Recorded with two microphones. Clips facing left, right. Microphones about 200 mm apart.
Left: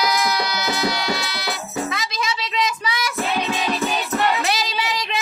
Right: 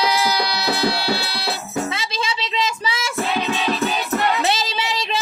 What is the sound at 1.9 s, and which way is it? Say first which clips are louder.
Child singing: even; 30° right (ahead or behind).